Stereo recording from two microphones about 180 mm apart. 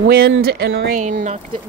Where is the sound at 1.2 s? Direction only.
35° right (ahead or behind).